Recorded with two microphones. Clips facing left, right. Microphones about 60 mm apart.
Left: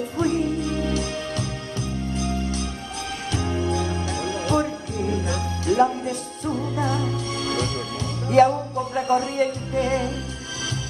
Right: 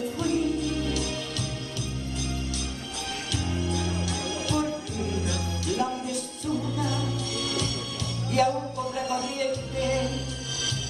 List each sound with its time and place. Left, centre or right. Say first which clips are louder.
0.2 s music: left 4 dB; left
2.1 s music: left 7 dB; left